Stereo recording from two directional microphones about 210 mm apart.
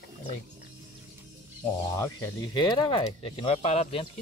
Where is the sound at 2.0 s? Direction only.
15° left (ahead or behind).